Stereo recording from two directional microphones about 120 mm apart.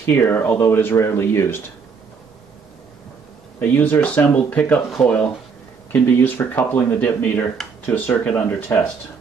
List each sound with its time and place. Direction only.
0.0 s speech: 20° left (ahead or behind)
3.5 s speech: 15° left (ahead or behind)